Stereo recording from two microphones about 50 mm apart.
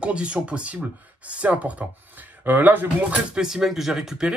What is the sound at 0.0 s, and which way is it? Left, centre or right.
Speech, right.